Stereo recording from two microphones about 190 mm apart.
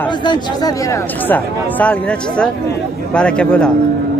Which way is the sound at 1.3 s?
5° left (ahead or behind).